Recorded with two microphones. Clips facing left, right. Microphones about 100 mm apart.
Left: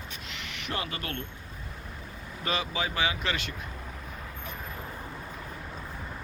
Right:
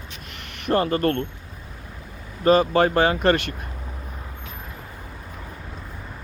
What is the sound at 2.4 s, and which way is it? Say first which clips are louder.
Speech: right 15 dB; 50° right (ahead or behind).